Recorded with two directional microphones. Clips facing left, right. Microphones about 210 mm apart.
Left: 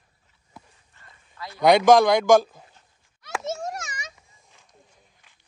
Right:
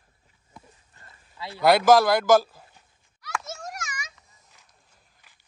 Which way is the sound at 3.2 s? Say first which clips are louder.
Left 5 dB; 30° left (ahead or behind).